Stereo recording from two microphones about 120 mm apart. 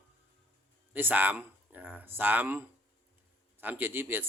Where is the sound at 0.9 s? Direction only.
15° right (ahead or behind).